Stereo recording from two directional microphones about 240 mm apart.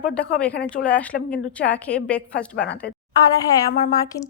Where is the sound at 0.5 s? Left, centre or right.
Left.